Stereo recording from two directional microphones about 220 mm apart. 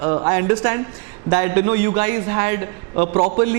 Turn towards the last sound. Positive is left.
turn(degrees=-30)  # may be behind; listen again after turning